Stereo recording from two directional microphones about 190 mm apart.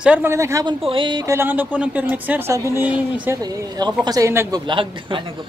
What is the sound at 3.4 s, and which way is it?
A man's voice, 20° right (ahead or behind).